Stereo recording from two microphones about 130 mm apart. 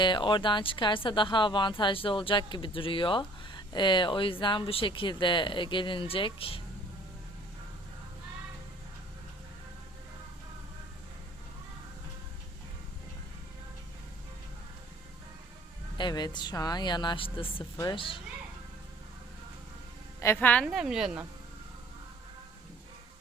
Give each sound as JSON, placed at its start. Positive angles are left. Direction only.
{"t": 0.0, "sound": "a woman's voice", "side_deg": 35}
{"t": 16.0, "sound": "a woman's voice", "side_deg": 35}
{"t": 20.2, "sound": "a woman's voice", "side_deg": 15}
{"t": 20.7, "sound": "a woman's voice", "side_deg": -5}